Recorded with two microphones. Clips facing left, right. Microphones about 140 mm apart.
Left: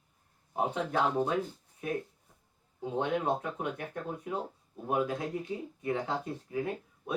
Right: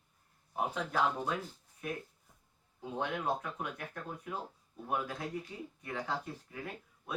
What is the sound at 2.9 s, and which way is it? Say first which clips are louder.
Speech: left 5 dB; 25° left (ahead or behind).